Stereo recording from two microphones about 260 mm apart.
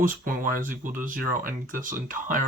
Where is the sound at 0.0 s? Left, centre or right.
Right.